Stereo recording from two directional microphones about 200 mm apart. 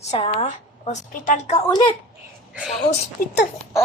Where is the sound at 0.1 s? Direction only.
30° left (ahead or behind).